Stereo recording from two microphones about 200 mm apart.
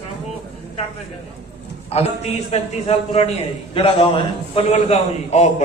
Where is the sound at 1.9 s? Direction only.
30° left (ahead or behind).